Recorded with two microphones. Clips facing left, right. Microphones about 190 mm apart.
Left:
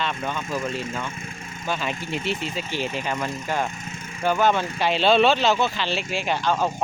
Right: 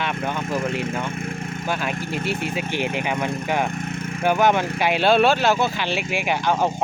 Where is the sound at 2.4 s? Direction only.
15° right (ahead or behind).